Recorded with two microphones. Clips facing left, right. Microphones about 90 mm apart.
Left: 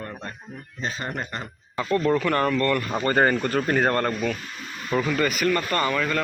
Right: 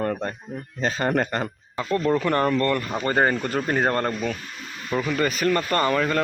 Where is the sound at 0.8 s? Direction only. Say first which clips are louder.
Right 8 dB; 65° right (ahead or behind).